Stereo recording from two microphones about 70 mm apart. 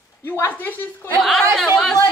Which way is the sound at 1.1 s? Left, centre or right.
Centre.